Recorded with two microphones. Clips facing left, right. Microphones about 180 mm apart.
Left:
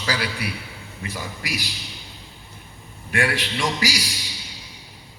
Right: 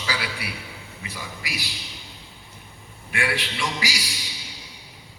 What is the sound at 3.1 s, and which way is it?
Speech, 40° left (ahead or behind).